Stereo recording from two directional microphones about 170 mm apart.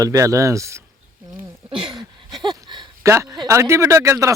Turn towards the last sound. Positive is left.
turn(degrees=-15)  # may be behind; listen again after turning